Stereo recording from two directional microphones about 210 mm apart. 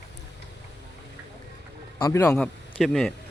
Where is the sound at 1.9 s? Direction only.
15° left (ahead or behind).